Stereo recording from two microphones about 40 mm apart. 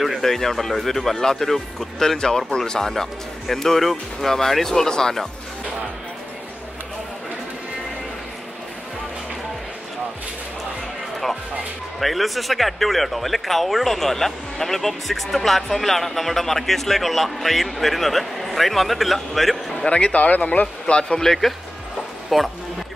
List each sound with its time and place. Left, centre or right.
0.0 s speech: centre
12.0 s speech: centre
19.9 s speech: left
20.6 s speech: left
21.2 s speech: centre